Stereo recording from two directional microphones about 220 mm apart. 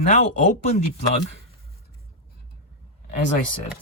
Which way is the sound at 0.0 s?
35° left (ahead or behind).